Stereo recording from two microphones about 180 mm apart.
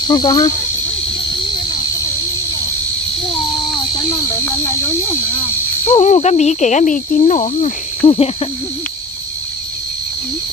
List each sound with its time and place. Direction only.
0.1 s speech: 25° left (ahead or behind)
4.1 s speech: 15° left (ahead or behind)
5.9 s speech: 35° left (ahead or behind)
8.0 s speech: 30° left (ahead or behind)